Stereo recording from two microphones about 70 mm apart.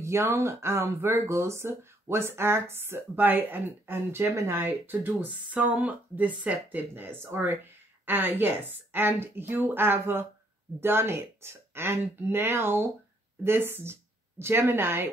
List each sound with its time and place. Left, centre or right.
0.0 s speech: right